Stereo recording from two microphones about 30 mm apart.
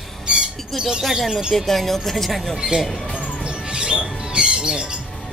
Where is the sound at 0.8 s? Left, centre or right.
Right.